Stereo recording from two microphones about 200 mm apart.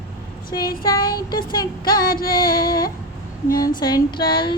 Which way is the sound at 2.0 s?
45° left (ahead or behind).